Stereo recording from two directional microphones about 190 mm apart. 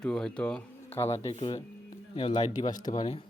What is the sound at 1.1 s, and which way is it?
Speech, 30° left (ahead or behind).